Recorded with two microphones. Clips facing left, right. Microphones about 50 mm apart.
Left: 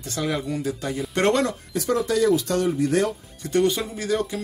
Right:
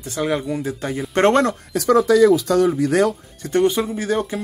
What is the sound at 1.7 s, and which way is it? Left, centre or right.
Speech, right.